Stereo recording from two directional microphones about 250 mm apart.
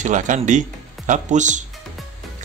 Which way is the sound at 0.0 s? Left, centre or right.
Right.